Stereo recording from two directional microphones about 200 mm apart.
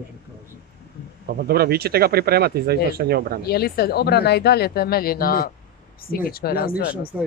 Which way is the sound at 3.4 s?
50° left (ahead or behind).